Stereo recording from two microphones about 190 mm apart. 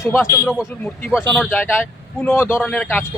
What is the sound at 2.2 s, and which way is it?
Speech, 10° left (ahead or behind).